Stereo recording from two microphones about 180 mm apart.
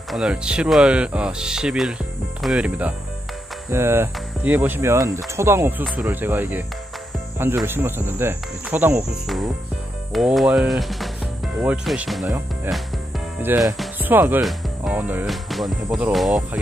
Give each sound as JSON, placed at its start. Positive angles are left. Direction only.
{"t": 0.1, "sound": "speech", "side_deg": -5}
{"t": 13.4, "sound": "speech", "side_deg": -15}